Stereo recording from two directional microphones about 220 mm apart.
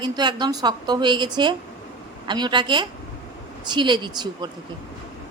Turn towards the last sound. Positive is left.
turn(degrees=-20)  # may be behind; listen again after turning